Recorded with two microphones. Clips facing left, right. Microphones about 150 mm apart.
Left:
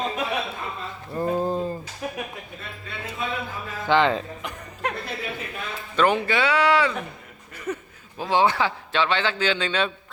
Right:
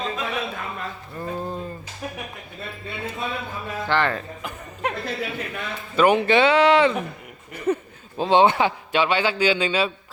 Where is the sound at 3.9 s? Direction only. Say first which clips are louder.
Left 3 dB; 20° left (ahead or behind).